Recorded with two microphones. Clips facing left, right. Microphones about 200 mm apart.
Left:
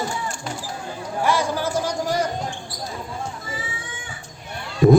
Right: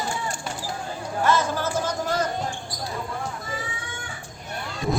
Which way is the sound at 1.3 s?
10° left (ahead or behind).